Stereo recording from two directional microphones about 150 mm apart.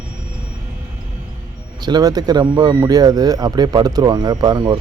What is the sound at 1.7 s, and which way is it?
Speech, 25° right (ahead or behind).